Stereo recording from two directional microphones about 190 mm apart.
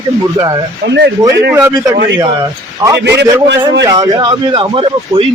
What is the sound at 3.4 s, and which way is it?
Speech, 65° right (ahead or behind).